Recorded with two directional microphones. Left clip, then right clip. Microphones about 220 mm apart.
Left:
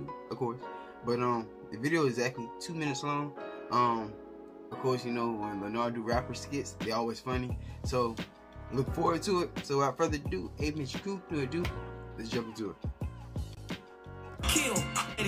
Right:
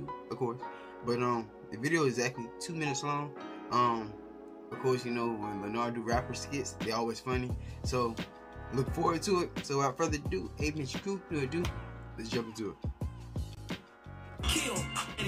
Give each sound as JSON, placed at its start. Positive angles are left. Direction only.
{"t": 0.3, "sound": "music", "side_deg": -5}
{"t": 1.0, "sound": "speech", "side_deg": -5}
{"t": 12.2, "sound": "music", "side_deg": -5}
{"t": 14.4, "sound": "music", "side_deg": 50}